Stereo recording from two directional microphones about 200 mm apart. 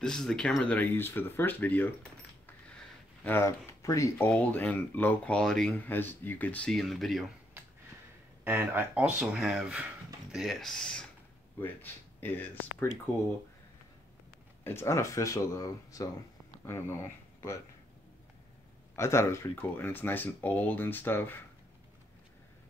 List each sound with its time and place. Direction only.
0.0 s speech: 5° left (ahead or behind)
3.3 s speech: 15° left (ahead or behind)
8.5 s speech: 10° right (ahead or behind); by 12.8 s 10° left (ahead or behind)
14.6 s speech: 10° left (ahead or behind)
18.9 s speech: 15° left (ahead or behind)